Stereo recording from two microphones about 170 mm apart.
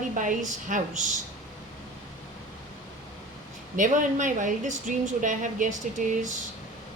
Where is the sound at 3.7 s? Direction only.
50° right (ahead or behind).